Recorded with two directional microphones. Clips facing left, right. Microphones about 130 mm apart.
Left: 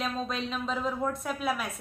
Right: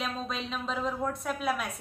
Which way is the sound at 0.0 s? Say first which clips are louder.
Left 2 dB; centre (ahead or behind).